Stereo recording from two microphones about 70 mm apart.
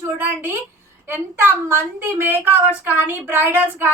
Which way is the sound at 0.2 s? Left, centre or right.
Right.